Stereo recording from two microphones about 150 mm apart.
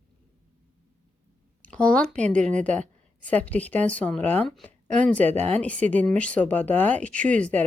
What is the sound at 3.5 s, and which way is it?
A woman's voice, 10° left (ahead or behind).